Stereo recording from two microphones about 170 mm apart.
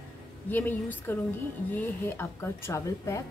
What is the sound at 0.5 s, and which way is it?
Speech, 10° left (ahead or behind).